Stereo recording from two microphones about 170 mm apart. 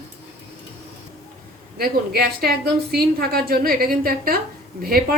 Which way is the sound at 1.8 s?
65° right (ahead or behind).